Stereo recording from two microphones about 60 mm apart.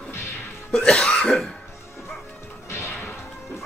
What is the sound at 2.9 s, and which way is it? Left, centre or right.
Smash, left.